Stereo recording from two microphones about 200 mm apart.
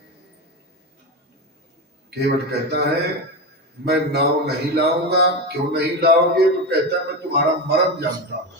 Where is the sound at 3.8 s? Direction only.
50° right (ahead or behind).